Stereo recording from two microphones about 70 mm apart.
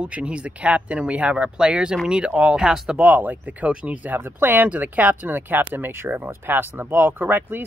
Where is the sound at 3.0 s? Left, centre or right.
Right.